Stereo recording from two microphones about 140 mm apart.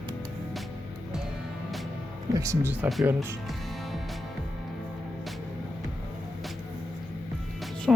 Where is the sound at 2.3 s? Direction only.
25° right (ahead or behind).